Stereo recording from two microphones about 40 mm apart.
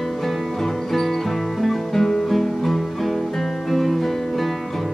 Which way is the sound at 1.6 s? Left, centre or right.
Centre.